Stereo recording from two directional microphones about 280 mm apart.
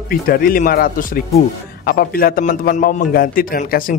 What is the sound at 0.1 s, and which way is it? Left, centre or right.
Speech, left.